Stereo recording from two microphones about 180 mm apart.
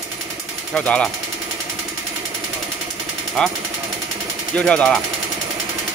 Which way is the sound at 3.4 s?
5° left (ahead or behind).